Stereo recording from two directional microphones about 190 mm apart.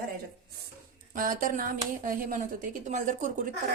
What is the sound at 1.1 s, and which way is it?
A woman's voice, 45° right (ahead or behind).